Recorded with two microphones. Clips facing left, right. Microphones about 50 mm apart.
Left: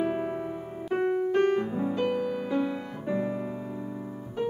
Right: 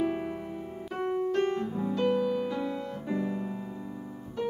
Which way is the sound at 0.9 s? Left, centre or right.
Left.